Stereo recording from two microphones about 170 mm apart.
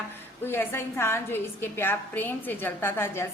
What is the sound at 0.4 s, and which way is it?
A woman's voice, 15° left (ahead or behind).